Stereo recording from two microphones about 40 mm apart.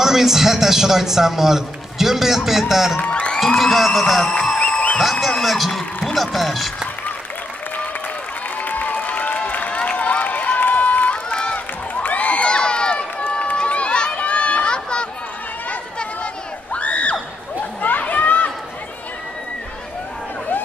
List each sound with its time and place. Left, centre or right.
0.0 s a man's voice: centre
3.1 s music: left
3.4 s speech: centre
4.3 s a sound: left
5.2 s speech: centre
8.5 s applause: left
9.5 s run: left
16.7 s neigh: left
17.6 s chatter: left